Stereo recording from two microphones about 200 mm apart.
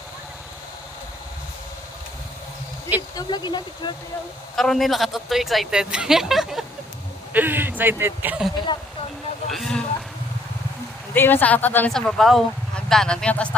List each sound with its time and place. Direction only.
3.2 s speech: 20° left (ahead or behind)
4.6 s a man's voice: centre (ahead or behind)
11.1 s speech: 10° left (ahead or behind)